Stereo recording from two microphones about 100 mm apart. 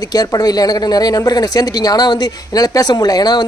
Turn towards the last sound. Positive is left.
turn(degrees=40)  # may be behind; listen again after turning